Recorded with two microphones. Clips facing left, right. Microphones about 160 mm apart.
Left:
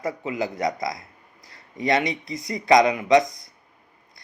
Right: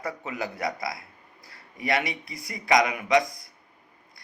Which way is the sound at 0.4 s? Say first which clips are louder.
Left 4 dB; 20° left (ahead or behind).